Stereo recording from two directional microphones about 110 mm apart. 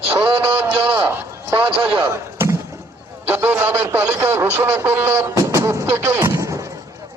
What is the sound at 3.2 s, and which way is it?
A man's voice, 20° right (ahead or behind).